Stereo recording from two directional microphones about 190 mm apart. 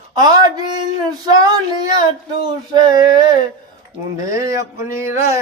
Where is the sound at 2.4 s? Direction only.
20° right (ahead or behind).